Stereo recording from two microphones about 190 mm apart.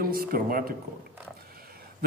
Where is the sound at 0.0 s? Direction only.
50° right (ahead or behind).